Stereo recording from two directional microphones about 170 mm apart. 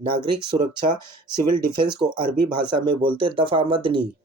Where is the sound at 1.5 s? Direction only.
25° right (ahead or behind).